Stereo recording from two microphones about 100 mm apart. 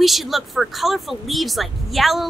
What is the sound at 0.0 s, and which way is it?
Speech, centre (ahead or behind).